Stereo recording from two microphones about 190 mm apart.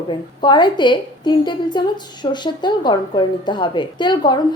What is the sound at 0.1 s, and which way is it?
A woman's voice, 25° left (ahead or behind).